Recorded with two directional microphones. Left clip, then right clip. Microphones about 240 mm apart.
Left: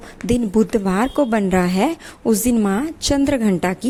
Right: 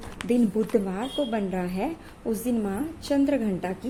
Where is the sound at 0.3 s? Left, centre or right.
Left.